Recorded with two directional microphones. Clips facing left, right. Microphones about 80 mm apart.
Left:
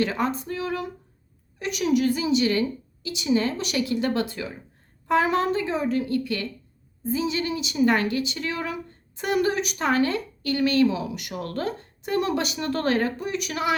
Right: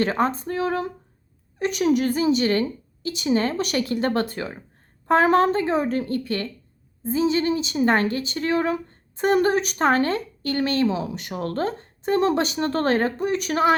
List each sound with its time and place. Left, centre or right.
0.0 s a woman's voice: right